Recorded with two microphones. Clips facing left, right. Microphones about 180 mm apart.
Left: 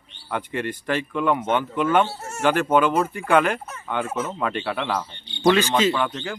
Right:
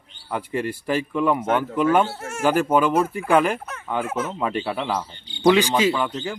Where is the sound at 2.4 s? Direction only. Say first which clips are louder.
Even; 5° right (ahead or behind).